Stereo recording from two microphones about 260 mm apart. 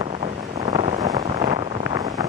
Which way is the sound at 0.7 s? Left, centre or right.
Right.